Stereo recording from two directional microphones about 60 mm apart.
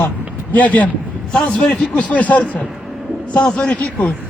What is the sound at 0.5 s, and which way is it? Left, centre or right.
A man's voice, left.